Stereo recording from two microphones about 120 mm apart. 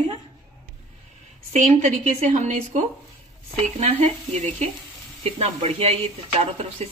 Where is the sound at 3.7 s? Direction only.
65° right (ahead or behind).